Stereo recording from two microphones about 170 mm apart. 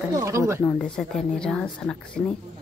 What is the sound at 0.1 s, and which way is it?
Speech, 20° right (ahead or behind).